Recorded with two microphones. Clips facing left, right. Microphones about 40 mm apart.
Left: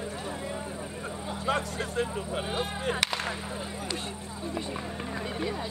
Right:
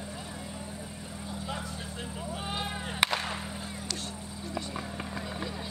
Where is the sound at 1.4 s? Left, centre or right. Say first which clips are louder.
Left 11 dB; left.